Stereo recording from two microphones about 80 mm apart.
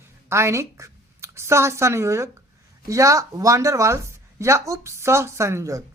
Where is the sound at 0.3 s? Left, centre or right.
Right.